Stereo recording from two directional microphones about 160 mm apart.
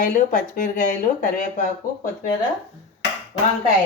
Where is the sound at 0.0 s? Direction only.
55° left (ahead or behind).